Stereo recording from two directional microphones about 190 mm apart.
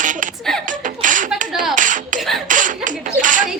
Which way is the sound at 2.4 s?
45° right (ahead or behind).